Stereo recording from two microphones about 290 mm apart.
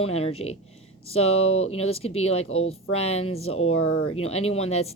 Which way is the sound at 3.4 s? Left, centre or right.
Left.